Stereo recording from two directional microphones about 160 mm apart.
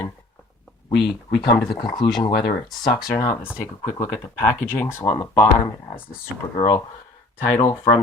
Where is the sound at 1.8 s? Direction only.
30° left (ahead or behind).